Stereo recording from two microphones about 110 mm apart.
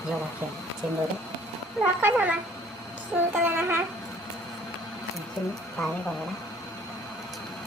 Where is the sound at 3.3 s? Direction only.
15° right (ahead or behind).